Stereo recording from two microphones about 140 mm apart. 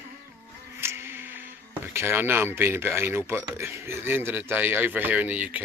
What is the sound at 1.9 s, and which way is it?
Speech, 15° right (ahead or behind).